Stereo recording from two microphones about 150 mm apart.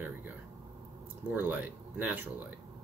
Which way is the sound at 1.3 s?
10° right (ahead or behind).